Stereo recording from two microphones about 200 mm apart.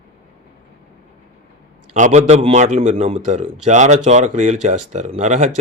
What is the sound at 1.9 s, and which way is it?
A man's voice, 35° right (ahead or behind).